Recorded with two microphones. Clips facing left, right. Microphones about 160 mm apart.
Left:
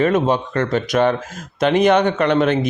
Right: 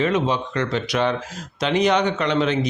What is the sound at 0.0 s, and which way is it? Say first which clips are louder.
Speech: left 4 dB; 50° left (ahead or behind).